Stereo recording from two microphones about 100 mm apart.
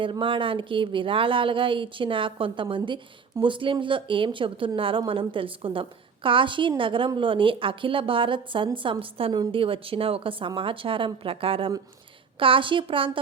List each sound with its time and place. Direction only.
0.0 s speech: 60° right (ahead or behind)